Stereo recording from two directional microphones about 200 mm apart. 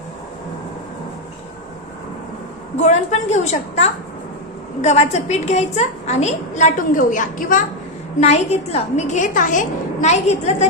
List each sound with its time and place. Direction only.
2.7 s a woman's voice: 35° left (ahead or behind)